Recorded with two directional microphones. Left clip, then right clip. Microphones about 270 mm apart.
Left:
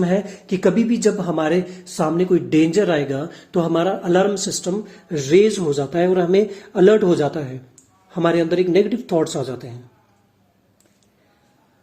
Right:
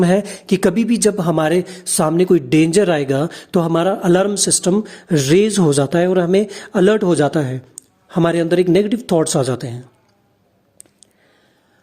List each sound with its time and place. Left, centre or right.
0.0 s speech: right